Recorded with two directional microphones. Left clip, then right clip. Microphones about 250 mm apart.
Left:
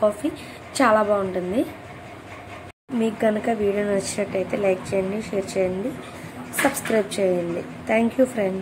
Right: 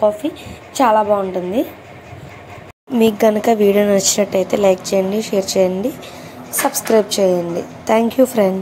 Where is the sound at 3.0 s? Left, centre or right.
Centre.